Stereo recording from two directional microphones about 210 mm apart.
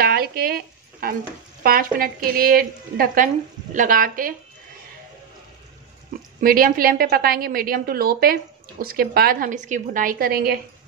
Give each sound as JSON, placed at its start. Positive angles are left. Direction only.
{"t": 0.0, "sound": "a sound", "side_deg": -45}
{"t": 1.0, "sound": "a woman's voice", "side_deg": -45}
{"t": 6.4, "sound": "a woman's voice", "side_deg": -45}